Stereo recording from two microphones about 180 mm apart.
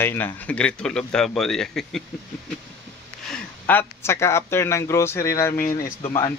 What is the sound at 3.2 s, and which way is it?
Speech, 5° left (ahead or behind).